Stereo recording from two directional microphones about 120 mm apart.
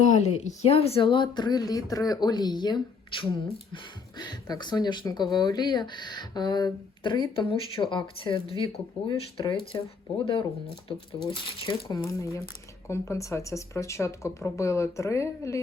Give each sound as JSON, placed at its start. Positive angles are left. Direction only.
{"t": 0.0, "sound": "speech", "side_deg": 75}
{"t": 11.3, "sound": "speech", "side_deg": 45}
{"t": 11.9, "sound": "speech", "side_deg": 30}